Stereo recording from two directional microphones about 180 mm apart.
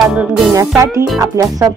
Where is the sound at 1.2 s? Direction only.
20° right (ahead or behind).